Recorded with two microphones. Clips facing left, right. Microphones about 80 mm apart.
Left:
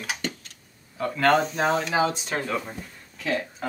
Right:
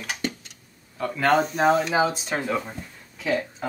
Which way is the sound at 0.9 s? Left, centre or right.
Centre.